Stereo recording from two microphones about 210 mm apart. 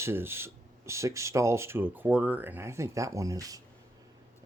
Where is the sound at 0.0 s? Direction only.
10° right (ahead or behind).